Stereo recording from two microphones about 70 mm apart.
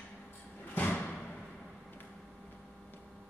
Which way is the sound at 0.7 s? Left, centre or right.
Left.